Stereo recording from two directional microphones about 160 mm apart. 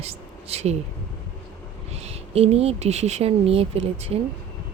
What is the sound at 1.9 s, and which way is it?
A woman's voice, 40° right (ahead or behind).